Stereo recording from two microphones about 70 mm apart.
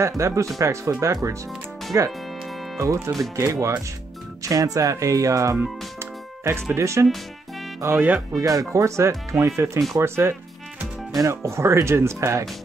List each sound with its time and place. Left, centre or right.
0.2 s speech: right
2.8 s speech: right
3.3 s speech: right
4.4 s speech: right
7.8 s speech: right
8.4 s speech: right